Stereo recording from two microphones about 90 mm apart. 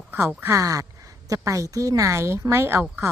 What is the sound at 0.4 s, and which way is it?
Speech, 35° right (ahead or behind).